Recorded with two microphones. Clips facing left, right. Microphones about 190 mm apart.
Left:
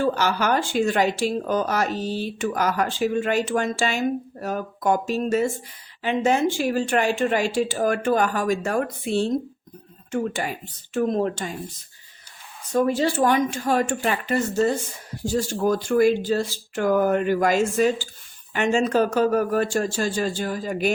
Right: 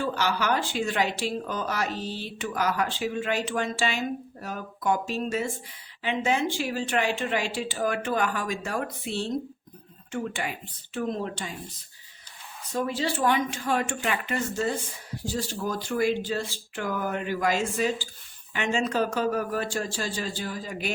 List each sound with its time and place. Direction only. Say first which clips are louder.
0.0 s speech: left 5 dB; 45° left (ahead or behind)
12.7 s speech: left 7 dB; 45° left (ahead or behind)